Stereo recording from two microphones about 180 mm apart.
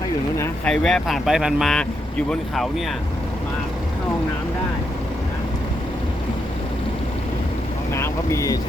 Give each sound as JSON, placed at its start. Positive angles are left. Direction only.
{"t": 0.3, "sound": "speech", "side_deg": 5}
{"t": 7.9, "sound": "speech", "side_deg": 15}